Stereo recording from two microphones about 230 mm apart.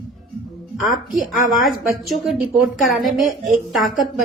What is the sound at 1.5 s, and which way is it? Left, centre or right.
A woman's voice, centre.